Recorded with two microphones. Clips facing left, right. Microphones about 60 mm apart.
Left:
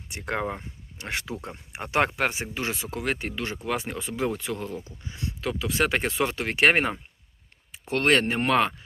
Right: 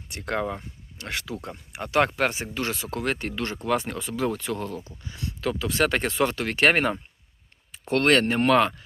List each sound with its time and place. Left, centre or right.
0.1 s speech: centre
3.9 s speech: centre
5.5 s speech: centre